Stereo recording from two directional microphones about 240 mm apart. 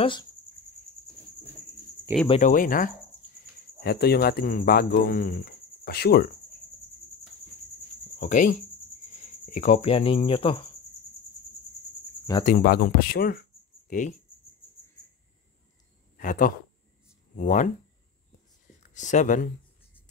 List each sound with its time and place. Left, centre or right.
0.0 s speech: centre
2.2 s speech: left
8.2 s speech: left
12.4 s speech: left
16.2 s speech: left
18.8 s speech: left